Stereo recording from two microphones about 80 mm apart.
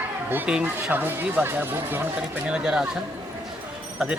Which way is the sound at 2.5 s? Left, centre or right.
Centre.